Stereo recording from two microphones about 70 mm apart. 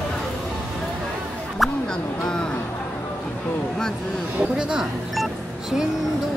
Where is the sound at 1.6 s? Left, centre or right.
Centre.